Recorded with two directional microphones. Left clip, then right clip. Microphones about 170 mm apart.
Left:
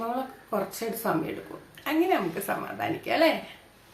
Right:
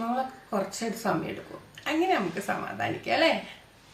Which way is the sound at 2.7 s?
20° left (ahead or behind).